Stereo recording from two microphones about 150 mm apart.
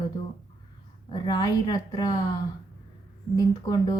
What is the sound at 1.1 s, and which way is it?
Speech, 25° left (ahead or behind).